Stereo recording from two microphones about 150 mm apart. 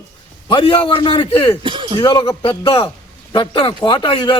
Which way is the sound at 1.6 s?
35° right (ahead or behind).